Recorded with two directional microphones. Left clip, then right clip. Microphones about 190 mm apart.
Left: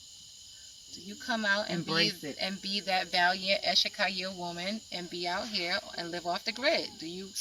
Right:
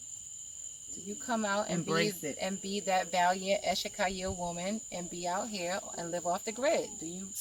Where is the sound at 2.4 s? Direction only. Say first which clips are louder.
Left 4 dB; 35° right (ahead or behind).